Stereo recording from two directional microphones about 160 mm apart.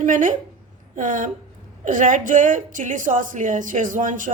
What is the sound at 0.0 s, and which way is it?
A woman's voice, 55° right (ahead or behind).